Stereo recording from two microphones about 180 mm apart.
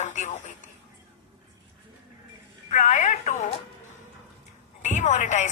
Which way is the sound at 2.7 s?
40° left (ahead or behind).